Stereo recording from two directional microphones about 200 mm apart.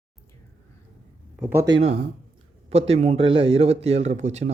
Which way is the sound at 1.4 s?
10° right (ahead or behind).